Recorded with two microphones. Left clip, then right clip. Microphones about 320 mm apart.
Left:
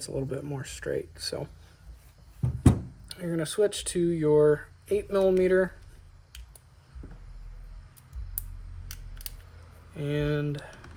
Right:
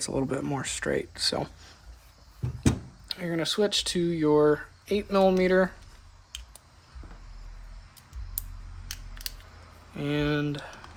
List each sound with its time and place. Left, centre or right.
0.2 s speech: right
3.1 s speech: right
10.0 s speech: right